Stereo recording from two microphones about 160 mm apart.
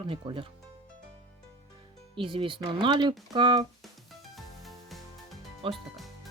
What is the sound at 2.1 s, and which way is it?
Speech, 30° right (ahead or behind).